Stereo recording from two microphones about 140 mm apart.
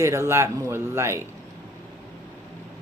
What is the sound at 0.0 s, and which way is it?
Speech, 20° right (ahead or behind).